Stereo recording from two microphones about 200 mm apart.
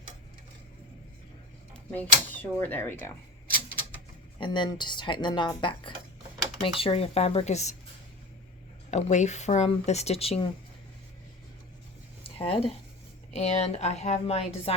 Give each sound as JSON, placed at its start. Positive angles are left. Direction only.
{"t": 1.9, "sound": "speech", "side_deg": 10}
{"t": 4.4, "sound": "speech", "side_deg": 25}
{"t": 8.9, "sound": "speech", "side_deg": 35}
{"t": 12.4, "sound": "speech", "side_deg": 30}